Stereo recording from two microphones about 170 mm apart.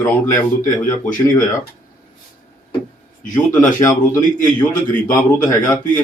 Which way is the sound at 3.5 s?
20° left (ahead or behind).